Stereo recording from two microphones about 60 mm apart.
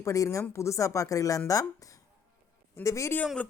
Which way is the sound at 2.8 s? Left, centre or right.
Left.